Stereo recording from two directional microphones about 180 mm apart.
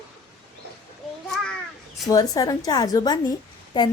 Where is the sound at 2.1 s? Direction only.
20° left (ahead or behind).